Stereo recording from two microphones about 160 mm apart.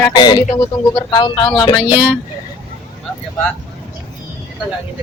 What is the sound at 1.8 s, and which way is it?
Speech, 10° right (ahead or behind).